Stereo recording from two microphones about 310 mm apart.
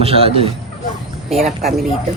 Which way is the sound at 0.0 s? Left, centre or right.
Centre.